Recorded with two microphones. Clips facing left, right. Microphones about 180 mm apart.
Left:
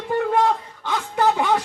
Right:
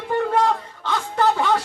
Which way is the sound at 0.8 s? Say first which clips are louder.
Even; 15° left (ahead or behind).